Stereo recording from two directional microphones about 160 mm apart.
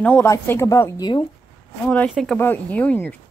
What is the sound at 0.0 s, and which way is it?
A woman's voice, 10° left (ahead or behind).